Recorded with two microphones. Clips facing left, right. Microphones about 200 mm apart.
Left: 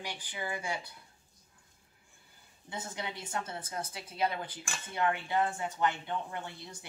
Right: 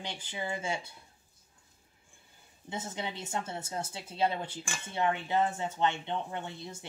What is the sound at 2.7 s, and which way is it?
Speech, 25° right (ahead or behind).